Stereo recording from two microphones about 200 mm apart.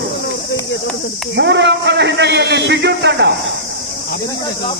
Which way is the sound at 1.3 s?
60° right (ahead or behind).